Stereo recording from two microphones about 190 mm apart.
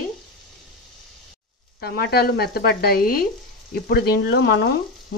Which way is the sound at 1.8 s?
55° left (ahead or behind).